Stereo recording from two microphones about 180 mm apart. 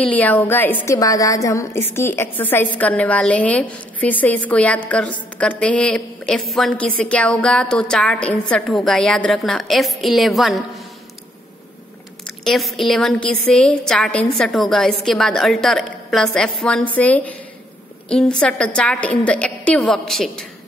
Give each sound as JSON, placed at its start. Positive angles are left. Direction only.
{"t": 0.0, "sound": "a woman's voice", "side_deg": 10}
{"t": 12.3, "sound": "a woman's voice", "side_deg": 0}